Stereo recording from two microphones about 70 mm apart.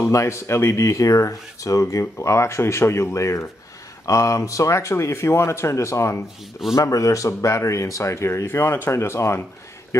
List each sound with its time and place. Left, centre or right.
0.1 s speech: left